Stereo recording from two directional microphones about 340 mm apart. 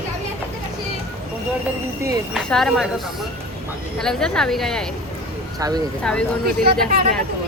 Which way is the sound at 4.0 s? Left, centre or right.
Centre.